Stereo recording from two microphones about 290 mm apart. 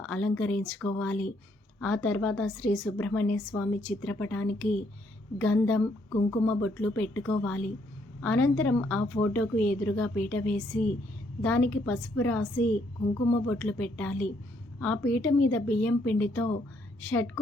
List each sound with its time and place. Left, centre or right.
0.0 s a woman's voice: centre